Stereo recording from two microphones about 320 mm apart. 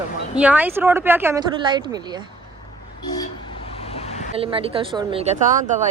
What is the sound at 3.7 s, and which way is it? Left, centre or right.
Vehicle, centre.